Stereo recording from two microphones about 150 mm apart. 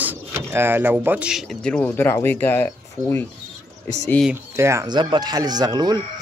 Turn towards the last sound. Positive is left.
turn(degrees=-30)  # may be behind; listen again after turning